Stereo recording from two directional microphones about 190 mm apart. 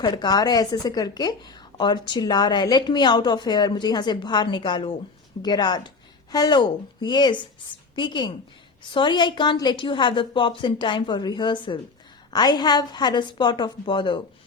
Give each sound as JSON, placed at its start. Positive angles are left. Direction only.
{"t": 0.0, "sound": "a woman's voice", "side_deg": 20}